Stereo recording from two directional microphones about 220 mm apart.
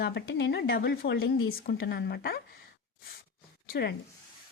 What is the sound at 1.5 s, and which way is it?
Speech, 45° left (ahead or behind).